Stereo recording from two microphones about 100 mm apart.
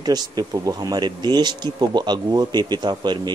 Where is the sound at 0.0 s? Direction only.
40° right (ahead or behind).